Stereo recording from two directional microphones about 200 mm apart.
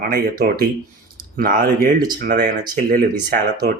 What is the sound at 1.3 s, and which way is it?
Speech, 45° right (ahead or behind).